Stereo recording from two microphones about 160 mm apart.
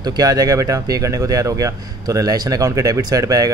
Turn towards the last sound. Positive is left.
turn(degrees=-20)  # may be behind; listen again after turning